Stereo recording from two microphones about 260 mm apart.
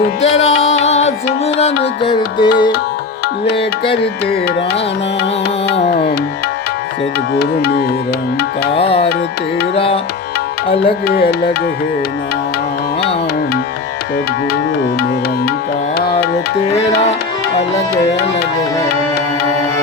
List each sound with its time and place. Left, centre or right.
0.5 s music: left
0.9 s music: left
7.3 s music: left
8.7 s music: left
11.0 s music: left